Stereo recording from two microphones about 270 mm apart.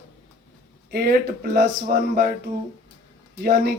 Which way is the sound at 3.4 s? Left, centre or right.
Right.